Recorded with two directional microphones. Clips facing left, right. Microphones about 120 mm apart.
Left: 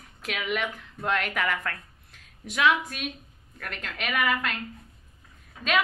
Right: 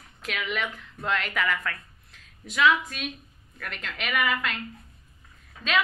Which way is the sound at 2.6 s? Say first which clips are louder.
Right 1 dB; 50° left (ahead or behind).